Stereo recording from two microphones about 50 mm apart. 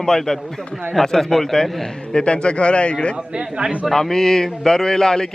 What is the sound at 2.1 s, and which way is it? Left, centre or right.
Speech, centre.